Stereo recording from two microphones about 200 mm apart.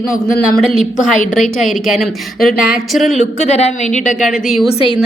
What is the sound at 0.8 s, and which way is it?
Speech, 40° left (ahead or behind).